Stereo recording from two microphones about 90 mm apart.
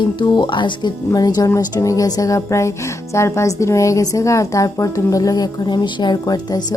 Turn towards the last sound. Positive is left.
turn(degrees=45)  # may be behind; listen again after turning